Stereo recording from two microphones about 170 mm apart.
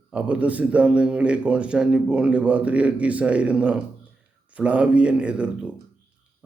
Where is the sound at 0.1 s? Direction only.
5° right (ahead or behind).